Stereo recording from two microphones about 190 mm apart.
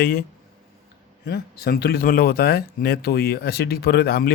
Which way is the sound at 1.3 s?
55° left (ahead or behind).